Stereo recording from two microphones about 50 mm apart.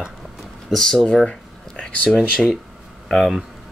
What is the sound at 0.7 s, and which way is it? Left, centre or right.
Speech, centre.